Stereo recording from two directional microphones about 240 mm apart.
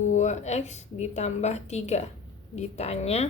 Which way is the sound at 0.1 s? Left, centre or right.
Left.